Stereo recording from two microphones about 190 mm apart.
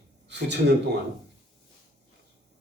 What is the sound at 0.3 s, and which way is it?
Speech, 65° right (ahead or behind).